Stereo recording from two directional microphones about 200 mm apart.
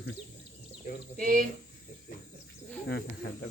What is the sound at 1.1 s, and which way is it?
Speech, 45° right (ahead or behind).